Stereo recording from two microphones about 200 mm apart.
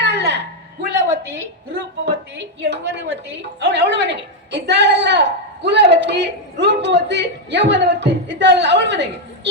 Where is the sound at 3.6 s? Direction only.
60° right (ahead or behind).